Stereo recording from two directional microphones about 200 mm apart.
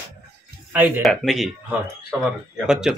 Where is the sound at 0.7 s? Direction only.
10° right (ahead or behind).